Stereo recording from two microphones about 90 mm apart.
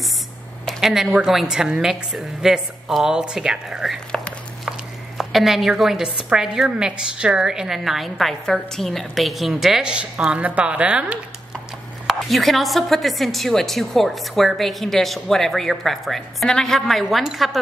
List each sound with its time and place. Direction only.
0.7 s a woman's voice: 5° right (ahead or behind)
12.1 s a woman's voice: centre (ahead or behind)